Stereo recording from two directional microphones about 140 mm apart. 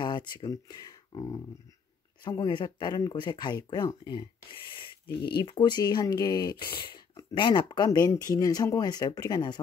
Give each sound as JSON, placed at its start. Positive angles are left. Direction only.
{"t": 0.0, "sound": "speech", "side_deg": 35}